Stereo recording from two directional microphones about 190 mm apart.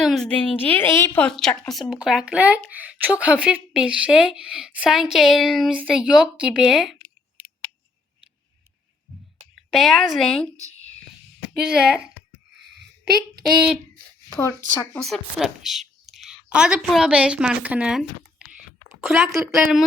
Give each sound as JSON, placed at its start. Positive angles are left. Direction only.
{"t": 0.0, "sound": "speech", "side_deg": 0}
{"t": 9.6, "sound": "speech", "side_deg": 0}
{"t": 11.5, "sound": "speech", "side_deg": -55}
{"t": 11.9, "sound": "speech", "side_deg": -5}
{"t": 13.4, "sound": "speech", "side_deg": -5}
{"t": 14.9, "sound": "a woman's voice", "side_deg": 0}